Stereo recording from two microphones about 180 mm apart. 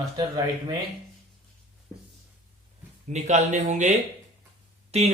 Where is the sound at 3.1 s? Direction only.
40° right (ahead or behind).